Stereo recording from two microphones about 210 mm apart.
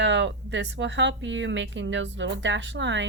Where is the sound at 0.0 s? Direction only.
60° right (ahead or behind).